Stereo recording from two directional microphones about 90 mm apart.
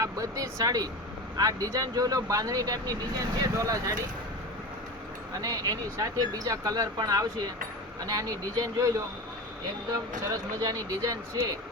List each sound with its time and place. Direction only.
0.0 s speech: 40° right (ahead or behind)
5.4 s speech: 40° right (ahead or behind)
10.2 s speech: 45° right (ahead or behind)